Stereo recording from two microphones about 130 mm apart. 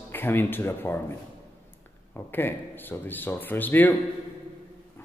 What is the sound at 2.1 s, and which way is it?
Speech, 15° left (ahead or behind).